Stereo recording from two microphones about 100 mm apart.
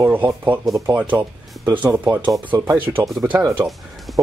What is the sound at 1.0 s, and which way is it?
Speech, 20° right (ahead or behind).